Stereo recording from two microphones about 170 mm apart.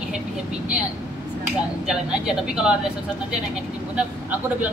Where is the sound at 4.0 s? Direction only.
10° right (ahead or behind).